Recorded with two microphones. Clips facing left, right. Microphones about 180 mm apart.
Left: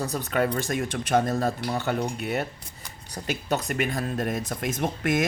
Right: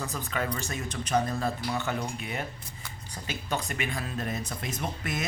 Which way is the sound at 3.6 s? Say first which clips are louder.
Left 6 dB; 45° left (ahead or behind).